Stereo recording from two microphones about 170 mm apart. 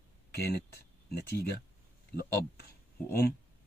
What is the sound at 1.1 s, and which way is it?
Speech, 70° left (ahead or behind).